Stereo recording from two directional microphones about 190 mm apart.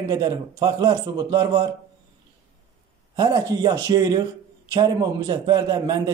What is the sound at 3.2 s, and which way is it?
A man's voice, 20° right (ahead or behind).